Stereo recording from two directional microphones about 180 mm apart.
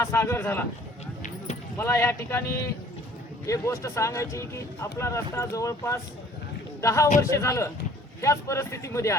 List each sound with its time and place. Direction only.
0.0 s speech: 15° left (ahead or behind)
1.8 s speech: 15° left (ahead or behind)
3.4 s speech: 15° left (ahead or behind)